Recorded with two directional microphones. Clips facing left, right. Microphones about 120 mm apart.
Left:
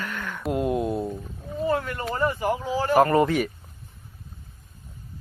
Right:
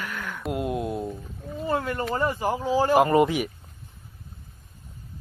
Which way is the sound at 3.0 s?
15° right (ahead or behind).